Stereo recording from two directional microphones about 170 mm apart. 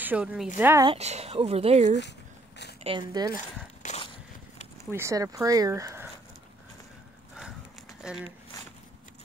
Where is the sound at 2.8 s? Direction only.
25° right (ahead or behind).